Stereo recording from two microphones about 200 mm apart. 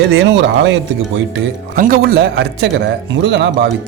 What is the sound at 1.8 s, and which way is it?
A man's voice, 45° right (ahead or behind).